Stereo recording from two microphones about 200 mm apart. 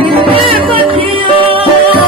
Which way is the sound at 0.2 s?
25° right (ahead or behind).